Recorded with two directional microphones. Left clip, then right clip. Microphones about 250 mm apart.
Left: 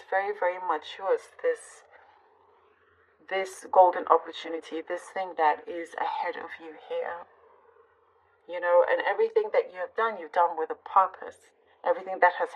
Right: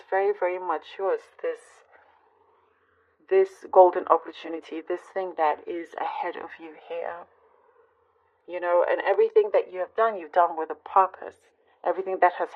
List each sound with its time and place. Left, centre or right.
0.1 s speech: right
3.2 s speech: right
8.5 s speech: right